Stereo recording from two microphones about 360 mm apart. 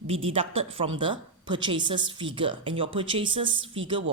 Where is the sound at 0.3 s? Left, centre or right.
Centre.